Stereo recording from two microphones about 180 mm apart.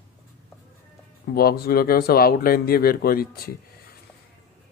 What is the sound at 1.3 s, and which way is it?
Speech, 60° left (ahead or behind).